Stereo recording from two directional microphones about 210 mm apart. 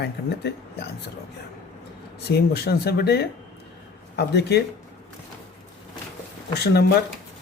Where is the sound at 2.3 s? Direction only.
50° left (ahead or behind).